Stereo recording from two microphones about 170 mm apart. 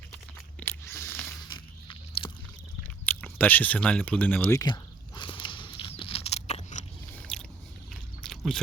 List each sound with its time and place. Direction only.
0.6 s a sound: 15° left (ahead or behind)
1.5 s biting: 30° left (ahead or behind)
2.8 s speech: 10° left (ahead or behind)
4.6 s biting: 25° left (ahead or behind); by 6.8 s 45° left (ahead or behind)
7.2 s biting: 5° left (ahead or behind)
8.2 s a sound: centre (ahead or behind)